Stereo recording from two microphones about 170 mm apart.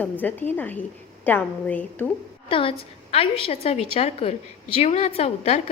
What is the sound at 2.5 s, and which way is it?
A woman's voice, 30° left (ahead or behind).